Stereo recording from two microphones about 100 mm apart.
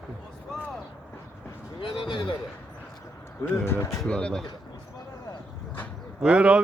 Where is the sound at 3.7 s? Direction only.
30° left (ahead or behind).